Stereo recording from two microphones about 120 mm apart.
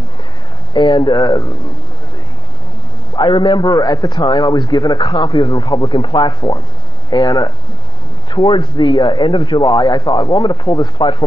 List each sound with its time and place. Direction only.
0.7 s a man's voice: 40° left (ahead or behind)
3.2 s a man's voice: 40° left (ahead or behind)
8.3 s a man's voice: 40° left (ahead or behind)